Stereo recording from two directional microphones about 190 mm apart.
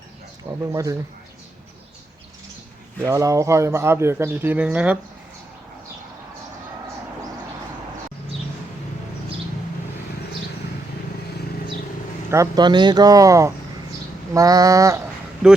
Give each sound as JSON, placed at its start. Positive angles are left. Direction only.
{"t": 0.6, "sound": "speech", "side_deg": -15}
{"t": 3.0, "sound": "speech", "side_deg": -15}
{"t": 12.3, "sound": "speech", "side_deg": -20}
{"t": 15.4, "sound": "speech", "side_deg": -5}